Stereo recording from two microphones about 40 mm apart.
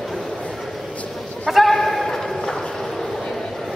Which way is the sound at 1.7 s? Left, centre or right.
Centre.